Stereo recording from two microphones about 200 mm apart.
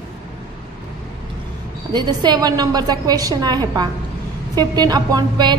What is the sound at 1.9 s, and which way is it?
A woman's voice, 20° right (ahead or behind).